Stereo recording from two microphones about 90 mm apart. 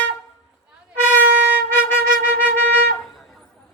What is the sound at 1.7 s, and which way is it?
Flute, 20° left (ahead or behind).